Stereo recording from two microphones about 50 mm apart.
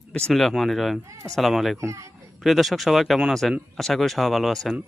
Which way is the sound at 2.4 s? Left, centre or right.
Centre.